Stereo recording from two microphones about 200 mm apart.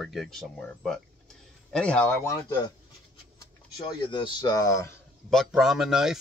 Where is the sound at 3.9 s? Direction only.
25° left (ahead or behind).